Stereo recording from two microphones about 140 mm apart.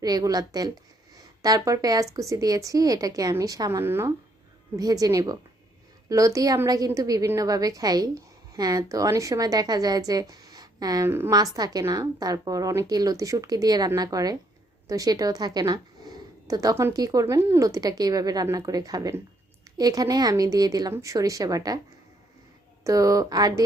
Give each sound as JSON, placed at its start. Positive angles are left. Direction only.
{"t": 0.0, "sound": "a woman's voice", "side_deg": -25}
{"t": 22.8, "sound": "a woman's voice", "side_deg": -25}